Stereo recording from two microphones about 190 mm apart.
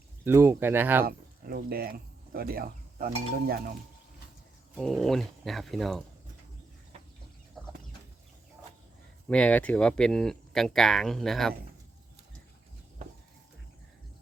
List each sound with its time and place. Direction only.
0.3 s speech: 10° right (ahead or behind)
1.0 s speech: 50° right (ahead or behind)
4.7 s speech: centre (ahead or behind)
9.3 s speech: 5° left (ahead or behind)